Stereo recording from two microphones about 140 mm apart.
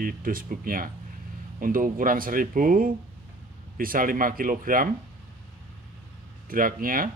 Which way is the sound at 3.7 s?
90° right.